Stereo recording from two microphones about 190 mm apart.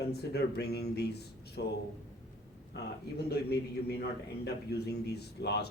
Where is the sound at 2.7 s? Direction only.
60° left (ahead or behind).